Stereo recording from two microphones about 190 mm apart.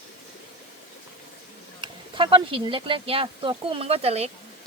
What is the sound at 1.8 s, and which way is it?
Speech, 25° right (ahead or behind).